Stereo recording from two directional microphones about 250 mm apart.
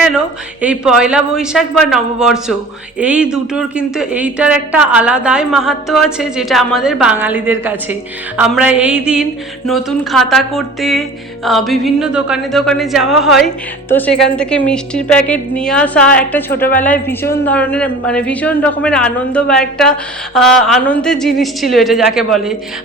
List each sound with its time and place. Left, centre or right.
0.0 s speech: centre
16.5 s a woman's voice: left
16.8 s a woman's voice: centre